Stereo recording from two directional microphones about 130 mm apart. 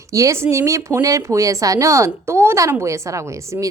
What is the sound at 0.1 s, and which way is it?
Speech, 25° right (ahead or behind).